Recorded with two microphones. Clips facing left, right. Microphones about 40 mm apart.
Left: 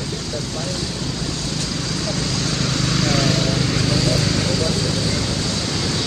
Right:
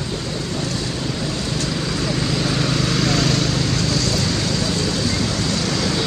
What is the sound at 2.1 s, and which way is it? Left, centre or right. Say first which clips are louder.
Vehicle: right 2 dB; centre.